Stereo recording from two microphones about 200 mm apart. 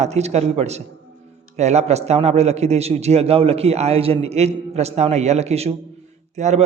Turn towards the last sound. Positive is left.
turn(degrees=-35)  # may be behind; listen again after turning